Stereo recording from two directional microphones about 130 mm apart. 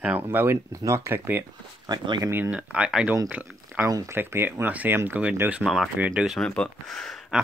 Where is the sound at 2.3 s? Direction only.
15° right (ahead or behind).